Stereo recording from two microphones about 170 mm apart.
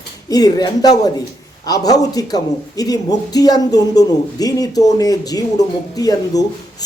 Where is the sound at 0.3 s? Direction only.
20° left (ahead or behind).